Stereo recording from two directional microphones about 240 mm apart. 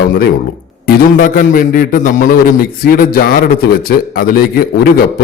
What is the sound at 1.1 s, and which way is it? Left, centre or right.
A man's voice, left.